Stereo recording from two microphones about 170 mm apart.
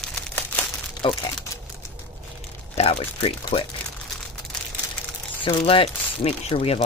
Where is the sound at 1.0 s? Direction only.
30° left (ahead or behind).